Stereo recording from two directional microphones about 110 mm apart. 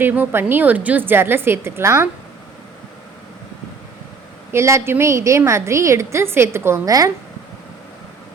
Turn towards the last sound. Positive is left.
turn(degrees=-35)  # may be behind; listen again after turning